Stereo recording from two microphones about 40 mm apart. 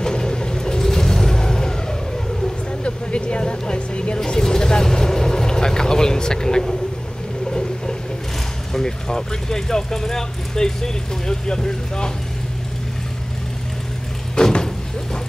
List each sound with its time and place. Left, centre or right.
0.0 s vehicle: centre
2.8 s vehicle: left
4.2 s vehicle: centre
8.7 s speech: centre
14.3 s vehicle: centre